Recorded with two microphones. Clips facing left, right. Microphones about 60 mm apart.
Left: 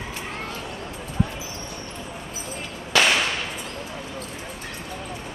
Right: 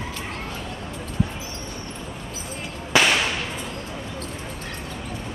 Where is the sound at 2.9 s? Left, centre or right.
Centre.